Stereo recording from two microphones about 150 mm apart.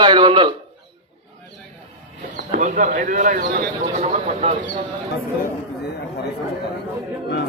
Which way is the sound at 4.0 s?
45° right (ahead or behind).